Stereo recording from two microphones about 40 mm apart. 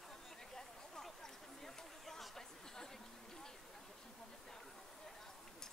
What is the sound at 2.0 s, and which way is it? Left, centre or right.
Chatter, centre.